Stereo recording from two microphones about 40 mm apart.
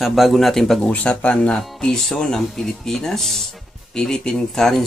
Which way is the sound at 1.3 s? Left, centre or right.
Centre.